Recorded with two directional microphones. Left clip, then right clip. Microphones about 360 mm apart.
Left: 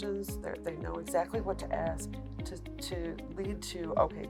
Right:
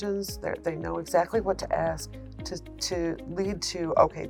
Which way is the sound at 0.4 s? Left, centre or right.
Right.